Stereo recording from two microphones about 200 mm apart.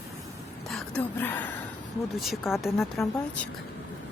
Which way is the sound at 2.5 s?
Centre (ahead or behind).